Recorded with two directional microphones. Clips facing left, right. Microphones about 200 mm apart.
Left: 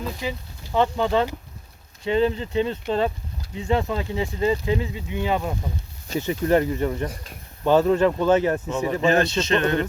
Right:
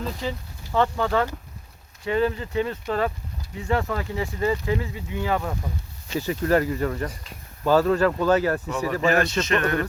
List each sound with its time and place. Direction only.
0.0 s speech: 10° left (ahead or behind)
6.1 s speech: 40° left (ahead or behind)
6.4 s speech: 20° left (ahead or behind)